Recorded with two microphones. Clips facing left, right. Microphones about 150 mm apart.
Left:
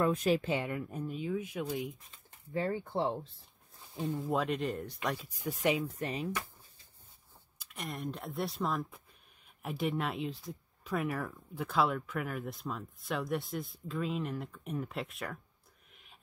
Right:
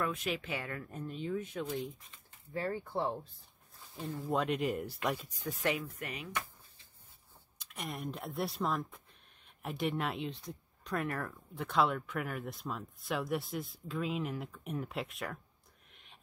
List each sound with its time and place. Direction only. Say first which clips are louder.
0.0 s speech: left 7 dB; 40° left (ahead or behind)
0.6 s speech: left 5 dB; 15° left (ahead or behind)
2.5 s speech: left 3 dB; 20° left (ahead or behind)
4.3 s speech: right 2 dB; centre (ahead or behind)
5.5 s speech: left 4 dB; 15° left (ahead or behind)
5.9 s speech: left 7 dB; 30° left (ahead or behind)
7.5 s speech: left 1 dB; centre (ahead or behind)